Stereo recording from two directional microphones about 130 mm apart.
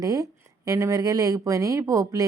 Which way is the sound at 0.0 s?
25° right (ahead or behind).